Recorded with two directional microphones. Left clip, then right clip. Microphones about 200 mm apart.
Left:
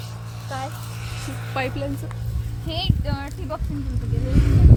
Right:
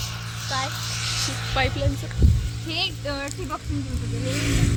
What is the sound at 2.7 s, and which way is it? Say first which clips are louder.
Speech: right 1 dB; 55° left (ahead or behind).